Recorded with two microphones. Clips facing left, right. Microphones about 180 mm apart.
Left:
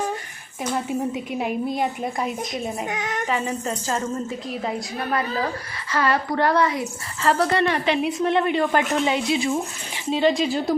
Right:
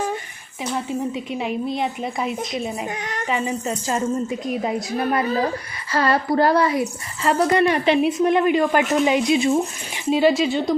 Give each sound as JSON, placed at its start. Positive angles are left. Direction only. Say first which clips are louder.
{"t": 0.7, "sound": "a woman's voice", "louder": "even", "side_deg": 5}
{"t": 4.6, "sound": "a woman's voice", "louder": "right 4 dB", "side_deg": -20}
{"t": 5.9, "sound": "a woman's voice", "louder": "right 3 dB", "side_deg": -35}
{"t": 7.2, "sound": "speech", "louder": "right 2 dB", "side_deg": -10}